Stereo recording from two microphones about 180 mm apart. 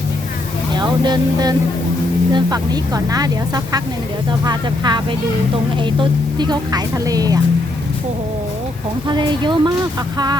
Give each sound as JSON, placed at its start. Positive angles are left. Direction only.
{"t": 0.7, "sound": "speech", "side_deg": -25}
{"t": 9.0, "sound": "speech", "side_deg": -25}